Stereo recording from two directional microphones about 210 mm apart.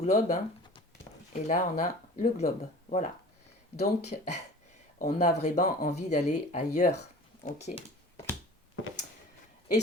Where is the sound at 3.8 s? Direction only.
30° left (ahead or behind).